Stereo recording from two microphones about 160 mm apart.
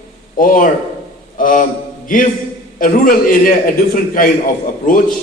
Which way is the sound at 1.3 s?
60° left (ahead or behind).